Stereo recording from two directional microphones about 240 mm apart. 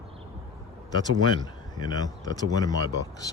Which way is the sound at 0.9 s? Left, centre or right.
Centre.